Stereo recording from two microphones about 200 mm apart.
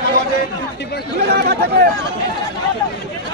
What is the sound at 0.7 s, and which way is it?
Speech, 55° left (ahead or behind).